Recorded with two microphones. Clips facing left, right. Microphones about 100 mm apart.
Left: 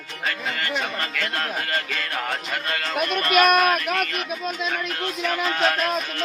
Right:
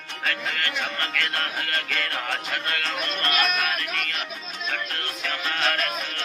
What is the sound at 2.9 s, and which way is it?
Speech, 65° left (ahead or behind).